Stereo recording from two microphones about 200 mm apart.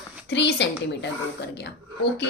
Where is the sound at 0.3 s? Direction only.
60° left (ahead or behind).